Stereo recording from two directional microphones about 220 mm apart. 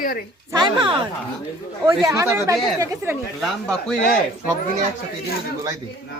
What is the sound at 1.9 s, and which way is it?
Speech, 15° right (ahead or behind).